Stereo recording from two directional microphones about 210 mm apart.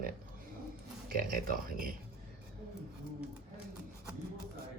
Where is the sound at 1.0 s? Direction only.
45° right (ahead or behind).